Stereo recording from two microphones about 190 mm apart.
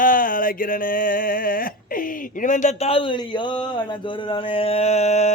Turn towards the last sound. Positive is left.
turn(degrees=35)  # may be behind; listen again after turning